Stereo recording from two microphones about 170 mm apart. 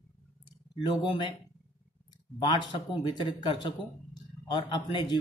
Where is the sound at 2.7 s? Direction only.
30° left (ahead or behind).